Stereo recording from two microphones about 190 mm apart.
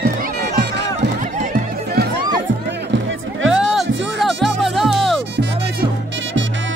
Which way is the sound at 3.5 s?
Centre (ahead or behind).